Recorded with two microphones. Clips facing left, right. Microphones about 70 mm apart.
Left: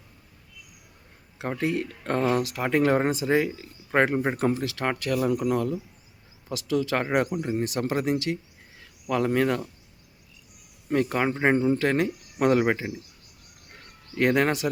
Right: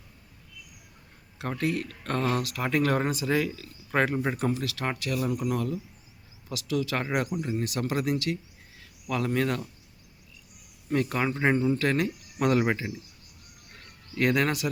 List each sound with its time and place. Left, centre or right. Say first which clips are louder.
1.4 s speech: left 2 dB; left
10.9 s speech: left 3 dB; left
14.3 s speech: left 3 dB; left